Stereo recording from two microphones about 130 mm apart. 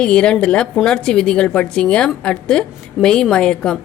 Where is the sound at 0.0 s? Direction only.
10° left (ahead or behind).